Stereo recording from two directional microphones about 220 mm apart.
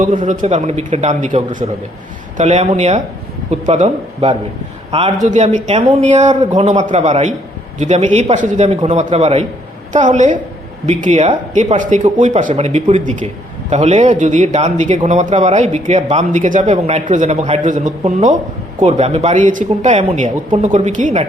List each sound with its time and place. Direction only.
0.2 s a man's voice: 35° right (ahead or behind)